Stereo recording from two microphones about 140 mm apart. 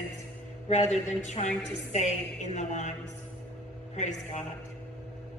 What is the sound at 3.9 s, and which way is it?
Speech, 55° left (ahead or behind).